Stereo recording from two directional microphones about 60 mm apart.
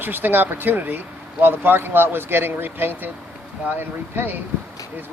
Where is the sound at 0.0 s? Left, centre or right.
Right.